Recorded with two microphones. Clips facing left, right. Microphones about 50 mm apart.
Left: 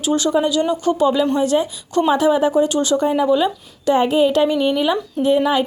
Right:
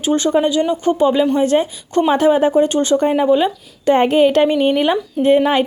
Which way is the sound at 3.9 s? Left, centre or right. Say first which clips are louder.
Right 3 dB; right.